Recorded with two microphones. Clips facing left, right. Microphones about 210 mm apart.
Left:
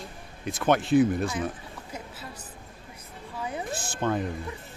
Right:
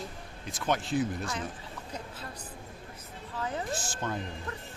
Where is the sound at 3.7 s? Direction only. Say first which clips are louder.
Left 5 dB; 60° left (ahead or behind).